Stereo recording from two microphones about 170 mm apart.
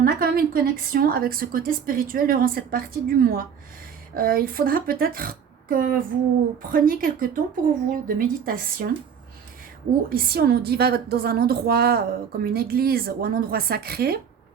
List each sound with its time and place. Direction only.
0.0 s a woman's voice: 60° right (ahead or behind)
10.1 s a woman's voice: 65° right (ahead or behind)